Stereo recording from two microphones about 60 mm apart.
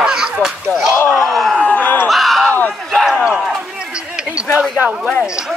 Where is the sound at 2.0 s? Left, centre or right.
Centre.